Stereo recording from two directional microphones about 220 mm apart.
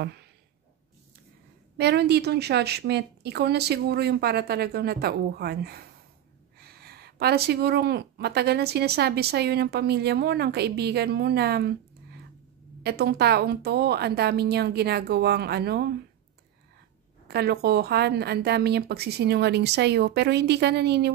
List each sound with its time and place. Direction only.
0.0 s speech: 50° right (ahead or behind)
1.8 s speech: 50° right (ahead or behind)
12.8 s speech: 45° right (ahead or behind)
17.3 s speech: 45° right (ahead or behind)